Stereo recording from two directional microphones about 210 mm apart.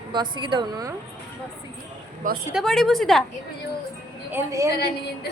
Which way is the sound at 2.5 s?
Centre (ahead or behind).